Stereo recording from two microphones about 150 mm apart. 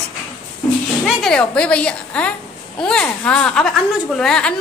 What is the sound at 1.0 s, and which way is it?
A woman's voice, 5° left (ahead or behind).